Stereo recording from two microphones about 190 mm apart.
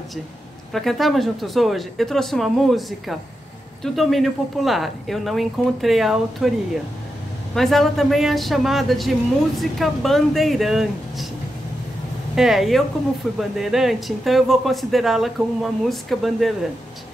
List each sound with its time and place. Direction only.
0.7 s speech: centre (ahead or behind)
7.5 s speech: centre (ahead or behind)
12.4 s speech: centre (ahead or behind)